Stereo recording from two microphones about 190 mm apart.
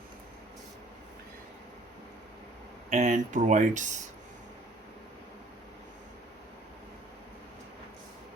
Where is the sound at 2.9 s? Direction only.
40° right (ahead or behind).